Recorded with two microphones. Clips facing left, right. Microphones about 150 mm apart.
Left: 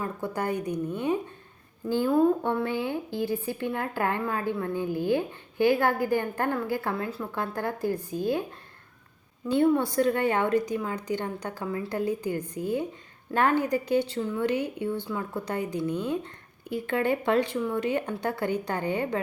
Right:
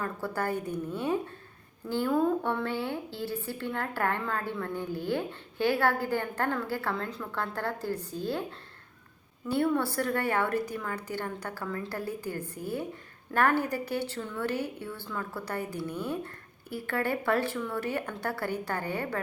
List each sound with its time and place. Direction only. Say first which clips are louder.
0.0 s a woman's voice: left 2 dB; 15° left (ahead or behind)